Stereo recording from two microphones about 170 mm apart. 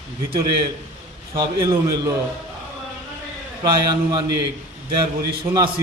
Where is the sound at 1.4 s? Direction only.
20° right (ahead or behind).